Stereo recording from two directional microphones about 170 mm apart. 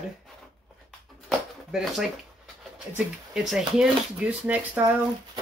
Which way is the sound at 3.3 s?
5° right (ahead or behind).